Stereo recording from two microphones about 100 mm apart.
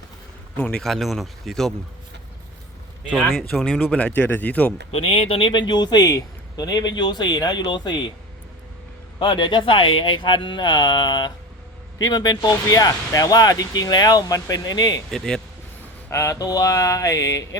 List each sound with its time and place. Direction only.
0.5 s a man's voice: 15° left (ahead or behind)
0.8 s speech: centre (ahead or behind)
3.3 s speech: centre (ahead or behind)
3.8 s speech: 15° left (ahead or behind)
4.9 s speech: 70° left (ahead or behind)
5.5 s a man's voice: 45° left (ahead or behind)
9.1 s a man's voice: 55° left (ahead or behind)
15.1 s speech: 5° left (ahead or behind)
16.0 s speech: 30° left (ahead or behind)